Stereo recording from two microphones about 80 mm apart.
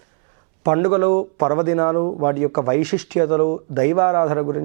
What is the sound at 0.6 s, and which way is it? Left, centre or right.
Speech, centre.